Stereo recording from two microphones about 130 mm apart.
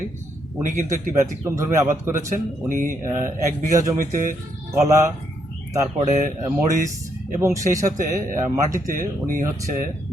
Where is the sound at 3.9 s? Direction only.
90° right.